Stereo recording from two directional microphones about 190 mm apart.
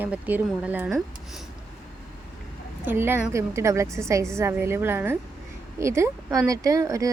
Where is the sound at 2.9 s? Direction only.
10° right (ahead or behind).